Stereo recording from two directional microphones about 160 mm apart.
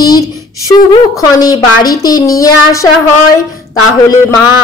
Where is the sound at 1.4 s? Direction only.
25° left (ahead or behind).